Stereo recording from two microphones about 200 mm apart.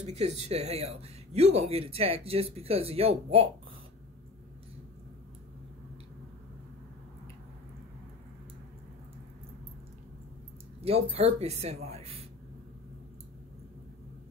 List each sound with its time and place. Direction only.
0.0 s speech: 30° right (ahead or behind)
10.8 s speech: 30° right (ahead or behind)